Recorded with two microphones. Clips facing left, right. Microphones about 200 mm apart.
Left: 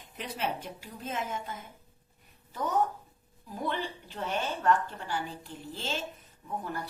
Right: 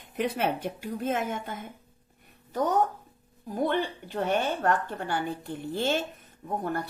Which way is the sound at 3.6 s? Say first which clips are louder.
Right 7 dB; 55° right (ahead or behind).